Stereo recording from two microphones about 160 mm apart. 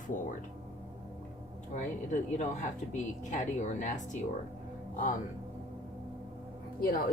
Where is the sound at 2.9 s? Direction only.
50° left (ahead or behind).